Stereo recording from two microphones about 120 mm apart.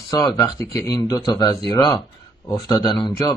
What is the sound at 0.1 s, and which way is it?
A man's voice, 30° left (ahead or behind).